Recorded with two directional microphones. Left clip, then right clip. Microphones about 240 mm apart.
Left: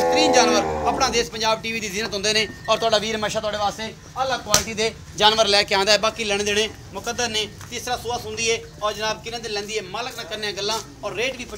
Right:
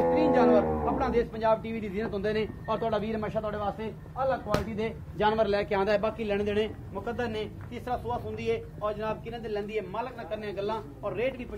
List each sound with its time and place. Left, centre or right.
0.0 s a man's voice: left
4.7 s a man's voice: left